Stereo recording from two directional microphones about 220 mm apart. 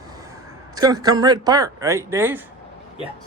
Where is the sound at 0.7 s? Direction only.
15° right (ahead or behind).